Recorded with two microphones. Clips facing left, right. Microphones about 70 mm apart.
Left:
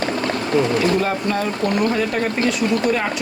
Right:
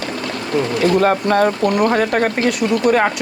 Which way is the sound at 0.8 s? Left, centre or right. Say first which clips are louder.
Right 4 dB; right.